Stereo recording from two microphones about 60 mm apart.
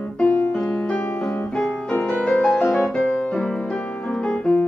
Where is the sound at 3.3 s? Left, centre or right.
Centre.